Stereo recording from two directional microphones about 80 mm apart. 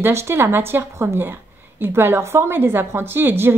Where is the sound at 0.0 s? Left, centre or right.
Right.